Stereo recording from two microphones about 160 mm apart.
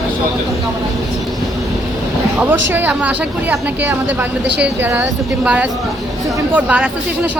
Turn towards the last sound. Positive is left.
turn(degrees=-10)  # may be behind; listen again after turning